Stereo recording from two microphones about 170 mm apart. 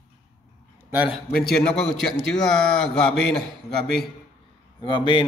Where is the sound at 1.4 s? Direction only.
5° left (ahead or behind).